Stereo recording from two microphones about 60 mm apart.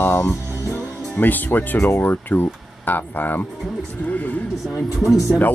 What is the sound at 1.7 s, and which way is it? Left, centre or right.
Speech, left.